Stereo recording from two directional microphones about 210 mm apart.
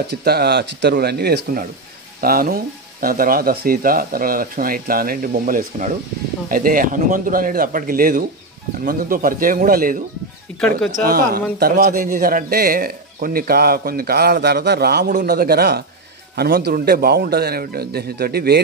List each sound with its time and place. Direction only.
0.1 s a man's voice: 50° right (ahead or behind)
10.5 s speech: 5° left (ahead or behind)
11.1 s a man's voice: 45° right (ahead or behind)